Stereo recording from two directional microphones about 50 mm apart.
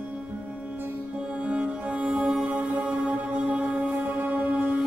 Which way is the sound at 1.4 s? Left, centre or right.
Right.